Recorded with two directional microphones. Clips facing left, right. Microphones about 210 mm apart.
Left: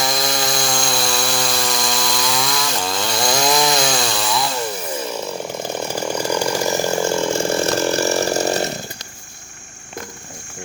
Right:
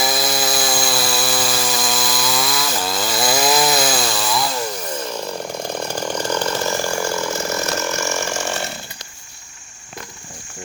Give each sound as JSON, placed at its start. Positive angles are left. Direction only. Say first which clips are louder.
{"t": 0.0, "sound": "chainsaw", "louder": "right 1 dB", "side_deg": -5}